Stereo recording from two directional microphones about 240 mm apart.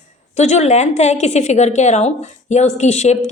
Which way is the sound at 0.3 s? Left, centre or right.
Left.